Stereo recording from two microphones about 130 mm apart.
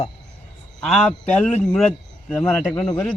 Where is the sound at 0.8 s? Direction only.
5° left (ahead or behind).